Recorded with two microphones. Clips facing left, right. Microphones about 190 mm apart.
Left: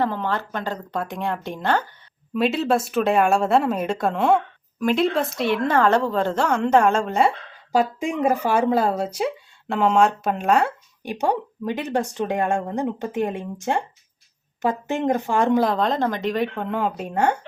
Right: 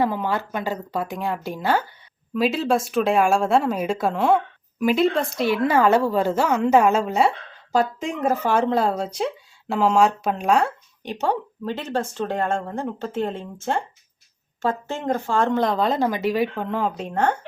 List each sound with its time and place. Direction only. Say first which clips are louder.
0.0 s a woman's voice: right 1 dB; 10° right (ahead or behind); by 15.6 s 15° left (ahead or behind)
15.6 s a woman's voice: even; centre (ahead or behind)